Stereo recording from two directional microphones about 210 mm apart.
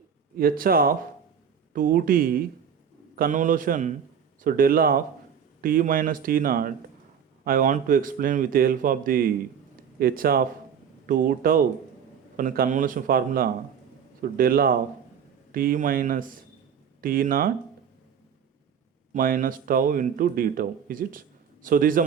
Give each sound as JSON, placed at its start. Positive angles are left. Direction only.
{"t": 0.3, "sound": "a man's voice", "side_deg": -45}
{"t": 19.1, "sound": "a man's voice", "side_deg": -40}